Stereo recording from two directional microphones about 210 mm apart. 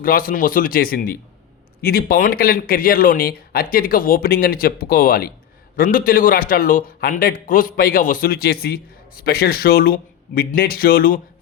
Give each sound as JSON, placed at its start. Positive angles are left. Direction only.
{"t": 0.0, "sound": "a man's voice", "side_deg": 40}